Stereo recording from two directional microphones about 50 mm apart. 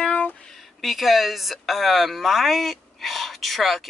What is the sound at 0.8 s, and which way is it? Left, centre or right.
Speech, centre.